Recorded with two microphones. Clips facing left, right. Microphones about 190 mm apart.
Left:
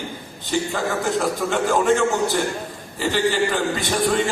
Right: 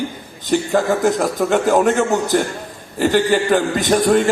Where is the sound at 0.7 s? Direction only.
45° right (ahead or behind).